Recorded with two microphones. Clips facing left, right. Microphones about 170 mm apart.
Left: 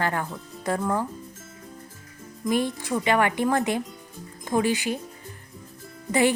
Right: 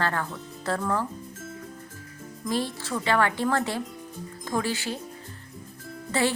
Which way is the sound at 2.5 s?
15° left (ahead or behind).